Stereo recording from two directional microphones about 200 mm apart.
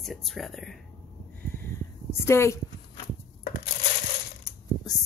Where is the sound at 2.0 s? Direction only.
15° left (ahead or behind).